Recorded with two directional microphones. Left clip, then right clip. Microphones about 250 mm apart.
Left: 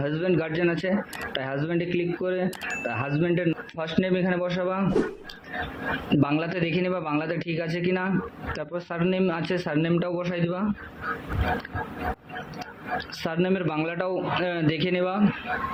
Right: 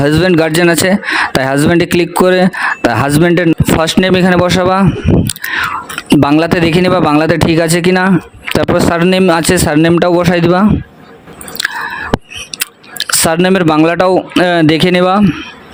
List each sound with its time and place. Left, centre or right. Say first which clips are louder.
0.0 s speech: right 16 dB; right
12.5 s speech: right 11 dB; right